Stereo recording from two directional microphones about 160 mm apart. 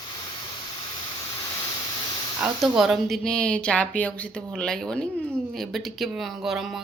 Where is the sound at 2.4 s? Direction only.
Centre (ahead or behind).